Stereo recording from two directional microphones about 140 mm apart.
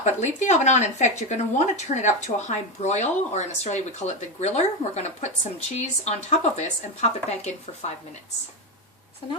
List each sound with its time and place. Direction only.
0.0 s speech: 55° left (ahead or behind)